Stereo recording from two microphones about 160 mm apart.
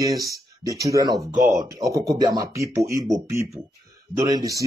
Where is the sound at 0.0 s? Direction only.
20° right (ahead or behind).